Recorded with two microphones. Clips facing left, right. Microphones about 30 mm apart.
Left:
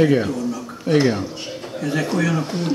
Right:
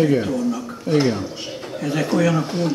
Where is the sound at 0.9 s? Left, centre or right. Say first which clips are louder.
Left 1 dB; centre.